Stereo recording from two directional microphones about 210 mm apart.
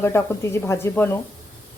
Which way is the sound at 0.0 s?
10° left (ahead or behind).